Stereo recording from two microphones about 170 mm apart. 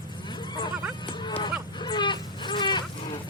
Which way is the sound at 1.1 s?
25° left (ahead or behind).